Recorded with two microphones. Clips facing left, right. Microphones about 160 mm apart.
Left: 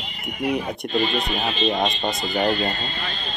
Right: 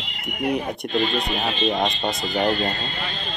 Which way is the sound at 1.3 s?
Centre (ahead or behind).